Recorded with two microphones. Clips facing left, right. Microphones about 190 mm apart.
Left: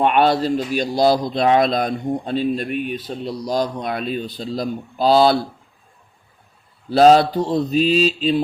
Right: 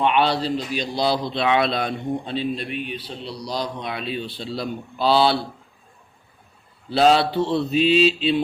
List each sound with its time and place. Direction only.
0.0 s a man's voice: 45° left (ahead or behind)
6.9 s mantra: 45° left (ahead or behind)